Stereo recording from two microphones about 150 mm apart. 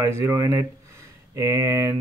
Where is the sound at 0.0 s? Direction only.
15° right (ahead or behind).